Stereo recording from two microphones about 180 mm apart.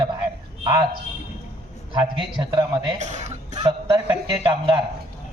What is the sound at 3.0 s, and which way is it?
Speech, 40° right (ahead or behind).